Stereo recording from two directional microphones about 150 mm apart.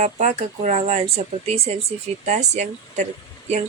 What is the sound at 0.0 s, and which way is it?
Speech, 55° right (ahead or behind).